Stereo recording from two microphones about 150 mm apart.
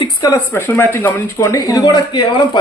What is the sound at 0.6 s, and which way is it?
Speech, 10° left (ahead or behind).